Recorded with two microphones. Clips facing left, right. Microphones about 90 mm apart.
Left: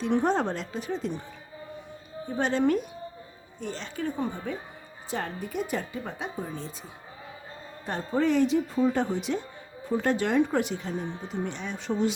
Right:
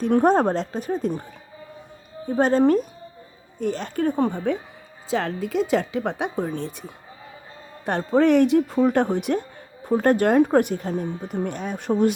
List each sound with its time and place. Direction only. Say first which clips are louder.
0.0 s speech: right 7 dB; 50° right (ahead or behind)
2.2 s speech: right 7 dB; 45° right (ahead or behind)
3.6 s speech: right 9 dB; 50° right (ahead or behind)
5.1 s speech: right 8 dB; 90° right; by 12.1 s 50° right (ahead or behind)